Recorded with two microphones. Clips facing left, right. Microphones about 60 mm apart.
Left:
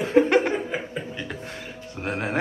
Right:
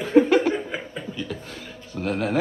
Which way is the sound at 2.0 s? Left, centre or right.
Centre.